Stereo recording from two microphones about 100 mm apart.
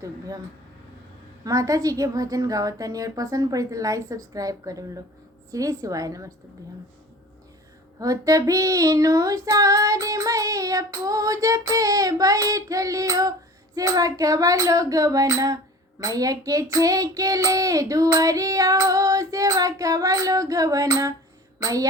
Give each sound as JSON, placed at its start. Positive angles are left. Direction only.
{"t": 1.5, "sound": "female singing", "side_deg": -35}
{"t": 7.9, "sound": "female singing", "side_deg": -35}